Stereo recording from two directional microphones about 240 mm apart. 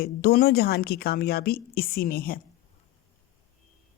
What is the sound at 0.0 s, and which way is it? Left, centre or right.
A woman's voice, left.